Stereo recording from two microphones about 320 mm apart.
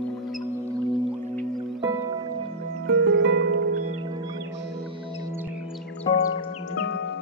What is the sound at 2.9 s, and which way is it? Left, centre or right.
Music, right.